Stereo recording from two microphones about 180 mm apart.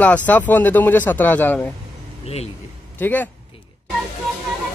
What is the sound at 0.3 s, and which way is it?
Speech, 10° left (ahead or behind).